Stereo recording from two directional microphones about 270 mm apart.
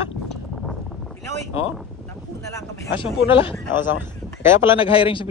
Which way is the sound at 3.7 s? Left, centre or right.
Centre.